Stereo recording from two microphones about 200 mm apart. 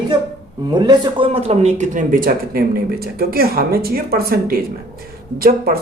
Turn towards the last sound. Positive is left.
turn(degrees=-50)  # may be behind; listen again after turning